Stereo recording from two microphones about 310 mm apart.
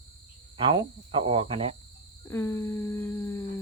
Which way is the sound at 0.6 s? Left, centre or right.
Centre.